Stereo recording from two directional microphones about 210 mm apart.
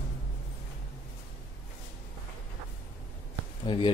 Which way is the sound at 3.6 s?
25° left (ahead or behind).